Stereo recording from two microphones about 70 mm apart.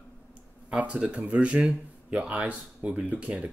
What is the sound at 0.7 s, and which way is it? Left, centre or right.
Speech, centre.